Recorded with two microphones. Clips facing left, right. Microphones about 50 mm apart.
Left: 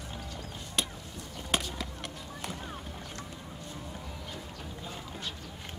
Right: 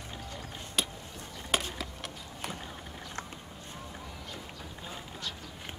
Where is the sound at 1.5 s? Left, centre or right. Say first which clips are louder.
Right 1 dB; centre.